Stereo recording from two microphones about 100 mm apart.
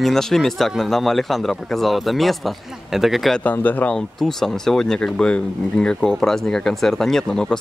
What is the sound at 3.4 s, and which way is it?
Speech, 15° left (ahead or behind).